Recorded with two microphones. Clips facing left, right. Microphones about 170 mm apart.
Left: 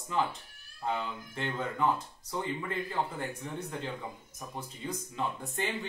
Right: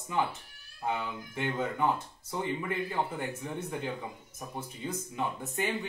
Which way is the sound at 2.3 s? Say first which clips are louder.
Right 2 dB; 20° right (ahead or behind).